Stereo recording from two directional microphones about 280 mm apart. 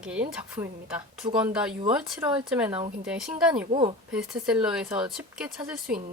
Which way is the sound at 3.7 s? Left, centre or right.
Centre.